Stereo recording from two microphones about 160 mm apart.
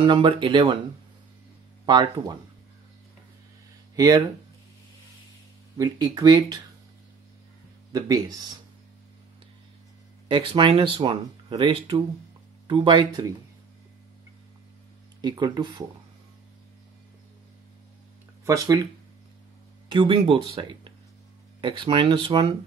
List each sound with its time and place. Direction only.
0.0 s speech: 30° right (ahead or behind)
1.9 s speech: 30° right (ahead or behind)
3.9 s speech: 20° right (ahead or behind)
5.8 s speech: 25° right (ahead or behind)
7.9 s speech: 25° right (ahead or behind)
10.2 s speech: 35° right (ahead or behind)
15.2 s speech: 25° right (ahead or behind)
18.4 s speech: 20° right (ahead or behind)
19.9 s speech: 30° right (ahead or behind)